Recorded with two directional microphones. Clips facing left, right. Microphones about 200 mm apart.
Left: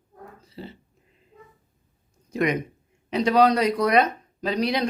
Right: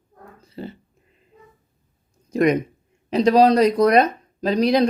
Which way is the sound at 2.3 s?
40° right (ahead or behind).